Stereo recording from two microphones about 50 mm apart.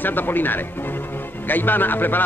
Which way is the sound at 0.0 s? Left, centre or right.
Left.